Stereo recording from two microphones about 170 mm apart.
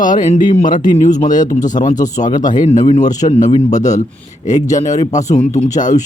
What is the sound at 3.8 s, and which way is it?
Speech, 20° left (ahead or behind).